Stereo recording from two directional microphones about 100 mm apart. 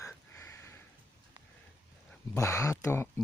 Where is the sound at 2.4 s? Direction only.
30° left (ahead or behind).